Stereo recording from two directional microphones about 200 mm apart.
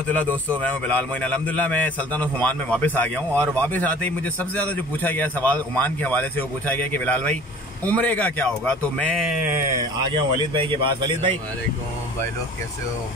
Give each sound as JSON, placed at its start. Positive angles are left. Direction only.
{"t": 0.1, "sound": "a man's voice", "side_deg": 5}
{"t": 10.5, "sound": "speech", "side_deg": -25}